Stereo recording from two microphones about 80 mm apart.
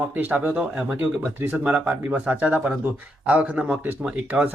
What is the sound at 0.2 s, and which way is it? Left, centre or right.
Speech, right.